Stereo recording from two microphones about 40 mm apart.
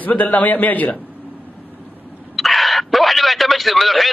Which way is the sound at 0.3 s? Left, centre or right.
Left.